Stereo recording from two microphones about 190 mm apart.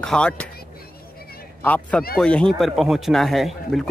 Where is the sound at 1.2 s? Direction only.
55° left (ahead or behind).